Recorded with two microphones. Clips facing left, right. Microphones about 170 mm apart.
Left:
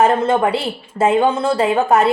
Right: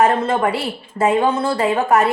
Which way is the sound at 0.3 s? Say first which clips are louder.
Left 2 dB; 25° left (ahead or behind).